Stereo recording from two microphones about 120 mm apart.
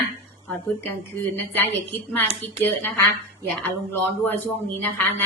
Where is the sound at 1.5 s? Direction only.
15° left (ahead or behind).